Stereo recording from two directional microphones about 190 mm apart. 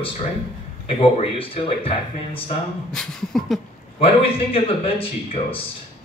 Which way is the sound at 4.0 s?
30° left (ahead or behind).